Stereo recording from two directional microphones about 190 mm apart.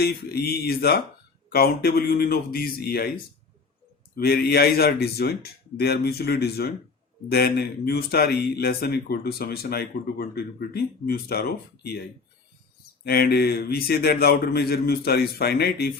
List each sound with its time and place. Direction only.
0.0 s a man's voice: 55° left (ahead or behind)
4.1 s speech: 55° left (ahead or behind)
13.1 s speech: 55° left (ahead or behind)